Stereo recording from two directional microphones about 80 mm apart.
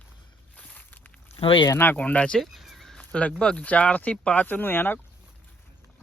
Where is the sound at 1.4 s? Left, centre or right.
Left.